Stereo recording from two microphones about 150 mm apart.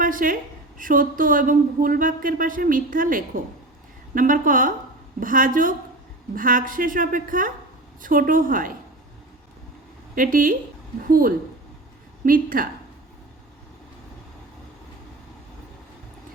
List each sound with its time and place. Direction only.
0.0 s a woman's voice: 65° right (ahead or behind)
10.2 s a woman's voice: 65° right (ahead or behind)